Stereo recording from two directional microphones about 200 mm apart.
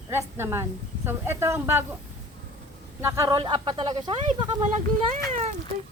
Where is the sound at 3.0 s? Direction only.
15° right (ahead or behind).